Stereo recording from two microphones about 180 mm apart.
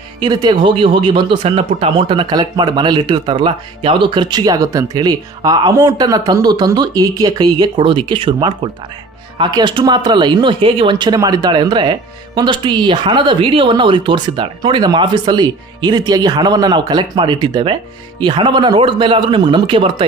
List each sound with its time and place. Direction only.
0.2 s speech: 25° right (ahead or behind)